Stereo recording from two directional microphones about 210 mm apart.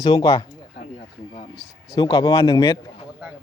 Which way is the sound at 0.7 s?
35° left (ahead or behind).